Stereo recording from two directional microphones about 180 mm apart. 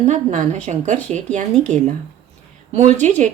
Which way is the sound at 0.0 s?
40° right (ahead or behind).